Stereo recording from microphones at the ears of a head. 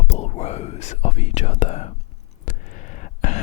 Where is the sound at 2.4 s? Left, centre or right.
Left.